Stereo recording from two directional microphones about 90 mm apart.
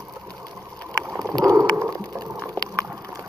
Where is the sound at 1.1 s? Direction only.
40° right (ahead or behind).